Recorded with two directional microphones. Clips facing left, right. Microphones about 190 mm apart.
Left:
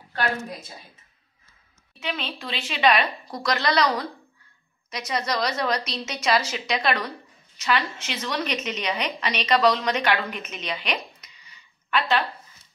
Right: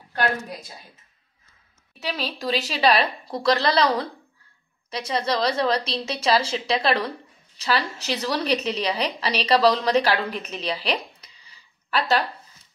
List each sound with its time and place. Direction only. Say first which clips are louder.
2.0 s a woman's voice: right 2 dB; 35° right (ahead or behind)